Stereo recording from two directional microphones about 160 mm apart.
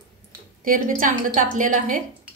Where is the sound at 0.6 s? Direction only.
60° right (ahead or behind).